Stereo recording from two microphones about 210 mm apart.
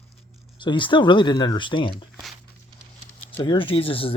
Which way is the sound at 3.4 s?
25° left (ahead or behind).